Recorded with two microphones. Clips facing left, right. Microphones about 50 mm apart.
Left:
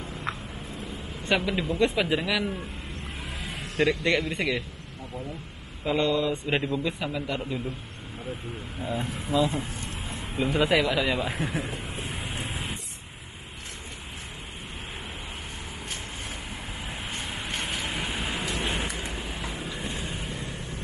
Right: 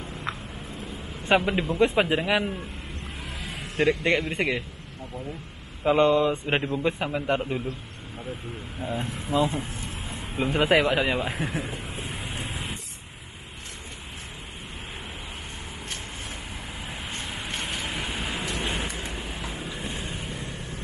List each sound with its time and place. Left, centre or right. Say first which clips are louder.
0.2 s a sound: even; centre
1.3 s a man's voice: right 3 dB; right
3.7 s a man's voice: right 1 dB; right
5.9 s a man's voice: right 5 dB; right
8.9 s speech: even; centre
9.5 s a sound: even; centre
10.5 s a man's voice: right 2 dB; right
11.6 s a sound: even; centre
17.1 s vehicle: even; centre
18.5 s a sound: even; centre
19.5 s vehicle: even; centre
19.8 s vehicle: even; right
20.1 s vehicle: even; centre